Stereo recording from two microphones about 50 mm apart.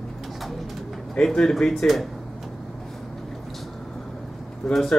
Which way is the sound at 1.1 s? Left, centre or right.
Centre.